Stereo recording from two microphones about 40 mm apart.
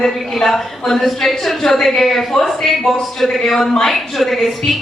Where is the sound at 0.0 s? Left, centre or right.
Centre.